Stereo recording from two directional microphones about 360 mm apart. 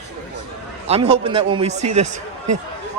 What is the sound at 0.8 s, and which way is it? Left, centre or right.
Speech, centre.